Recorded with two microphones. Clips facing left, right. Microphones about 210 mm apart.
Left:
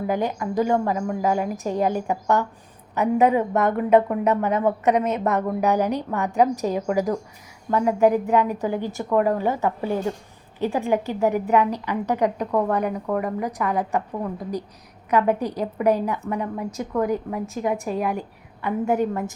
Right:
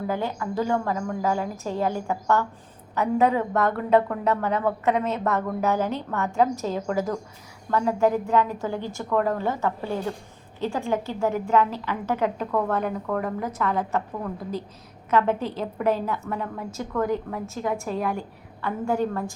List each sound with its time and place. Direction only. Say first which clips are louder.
0.1 s speech: left 5 dB; 15° left (ahead or behind)